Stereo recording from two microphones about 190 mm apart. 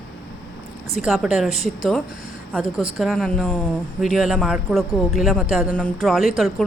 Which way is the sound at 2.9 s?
Centre (ahead or behind).